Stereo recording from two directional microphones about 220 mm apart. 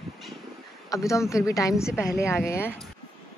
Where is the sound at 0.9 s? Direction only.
15° left (ahead or behind).